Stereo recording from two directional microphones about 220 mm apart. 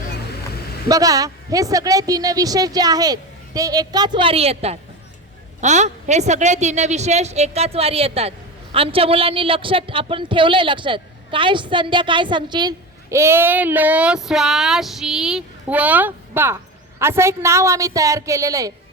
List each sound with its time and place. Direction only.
0.9 s a woman's voice: 15° right (ahead or behind)